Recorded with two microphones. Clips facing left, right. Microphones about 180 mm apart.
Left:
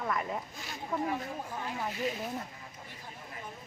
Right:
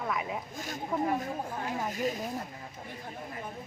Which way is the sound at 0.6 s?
45° right (ahead or behind).